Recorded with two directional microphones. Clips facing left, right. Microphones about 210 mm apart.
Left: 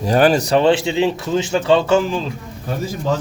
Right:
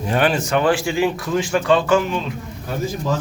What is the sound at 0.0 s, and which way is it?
A man's voice, 40° left (ahead or behind).